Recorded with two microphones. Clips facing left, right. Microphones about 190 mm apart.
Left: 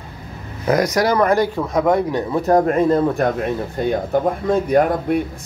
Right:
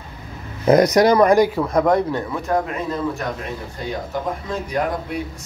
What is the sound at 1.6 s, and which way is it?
Speech, centre (ahead or behind).